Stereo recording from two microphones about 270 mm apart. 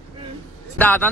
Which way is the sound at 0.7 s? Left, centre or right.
Centre.